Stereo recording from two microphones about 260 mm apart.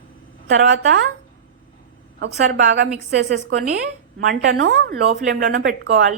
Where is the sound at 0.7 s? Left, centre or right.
Right.